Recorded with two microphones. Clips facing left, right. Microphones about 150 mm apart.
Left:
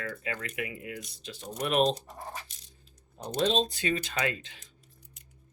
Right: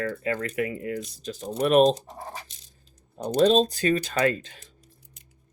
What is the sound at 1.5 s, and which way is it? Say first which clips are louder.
Speech: right 8 dB; 30° right (ahead or behind).